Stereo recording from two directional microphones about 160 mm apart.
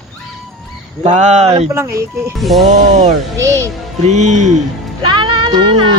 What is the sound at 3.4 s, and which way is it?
Speech, 20° right (ahead or behind).